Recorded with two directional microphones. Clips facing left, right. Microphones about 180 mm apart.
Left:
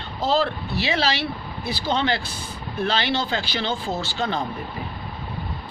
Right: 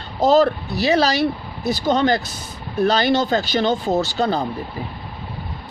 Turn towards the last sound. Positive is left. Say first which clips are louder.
# right 6 dB
turn(degrees=-35)  # may be behind; listen again after turning